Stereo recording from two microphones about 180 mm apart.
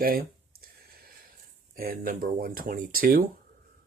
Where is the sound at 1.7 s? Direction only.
55° right (ahead or behind).